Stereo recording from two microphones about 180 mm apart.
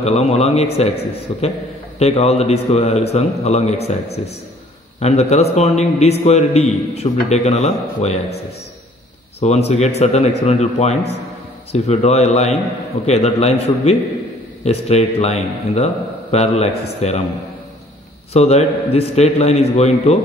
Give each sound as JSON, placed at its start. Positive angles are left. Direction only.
{"t": 0.0, "sound": "a man's voice", "side_deg": 35}
{"t": 5.0, "sound": "a man's voice", "side_deg": 35}
{"t": 9.4, "sound": "a man's voice", "side_deg": 35}
{"t": 18.3, "sound": "a man's voice", "side_deg": 35}